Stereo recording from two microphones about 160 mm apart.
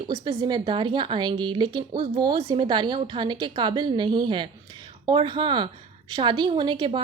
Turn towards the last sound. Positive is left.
turn(degrees=-30)  # may be behind; listen again after turning